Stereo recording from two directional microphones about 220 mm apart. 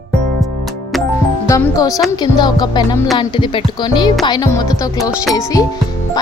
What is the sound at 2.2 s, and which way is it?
Speech, 20° left (ahead or behind).